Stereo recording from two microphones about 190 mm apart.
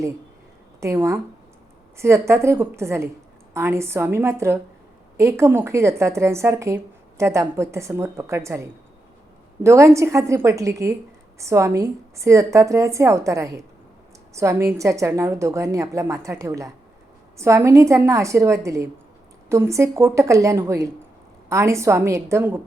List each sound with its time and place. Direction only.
0.8 s a woman's voice: 15° right (ahead or behind)
9.6 s a woman's voice: 15° right (ahead or behind)